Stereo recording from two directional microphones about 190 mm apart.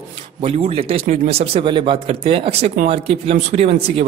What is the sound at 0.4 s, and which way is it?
Speech, 30° right (ahead or behind).